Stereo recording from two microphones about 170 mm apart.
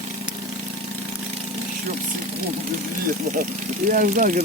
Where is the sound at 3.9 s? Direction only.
50° right (ahead or behind).